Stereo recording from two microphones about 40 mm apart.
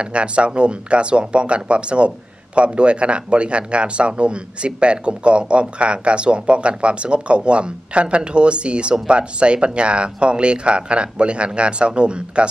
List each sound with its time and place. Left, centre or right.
0.0 s speech: right